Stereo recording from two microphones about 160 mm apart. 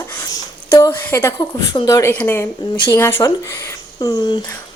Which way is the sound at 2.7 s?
30° left (ahead or behind).